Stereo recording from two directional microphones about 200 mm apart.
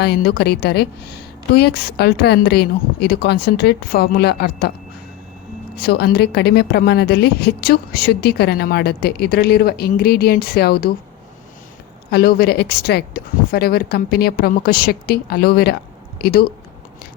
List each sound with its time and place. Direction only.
0.0 s a woman's voice: 55° left (ahead or behind)
5.7 s a woman's voice: 50° left (ahead or behind)
12.1 s a woman's voice: 50° left (ahead or behind)